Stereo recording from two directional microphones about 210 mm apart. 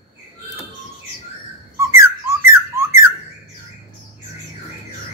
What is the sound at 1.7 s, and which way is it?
Whistling, 15° right (ahead or behind).